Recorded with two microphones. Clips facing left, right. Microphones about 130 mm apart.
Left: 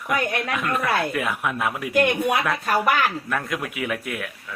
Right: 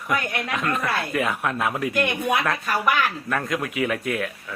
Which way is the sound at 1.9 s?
55° left (ahead or behind).